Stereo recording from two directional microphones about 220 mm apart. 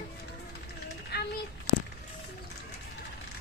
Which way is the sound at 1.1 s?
45° left (ahead or behind).